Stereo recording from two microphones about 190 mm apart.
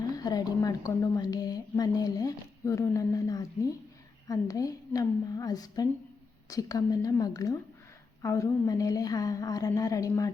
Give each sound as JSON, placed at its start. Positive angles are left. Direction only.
{"t": 0.2, "sound": "a woman's voice", "side_deg": 20}